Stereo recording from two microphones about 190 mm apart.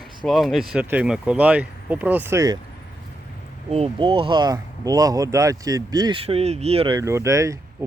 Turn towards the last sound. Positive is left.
turn(degrees=-15)  # may be behind; listen again after turning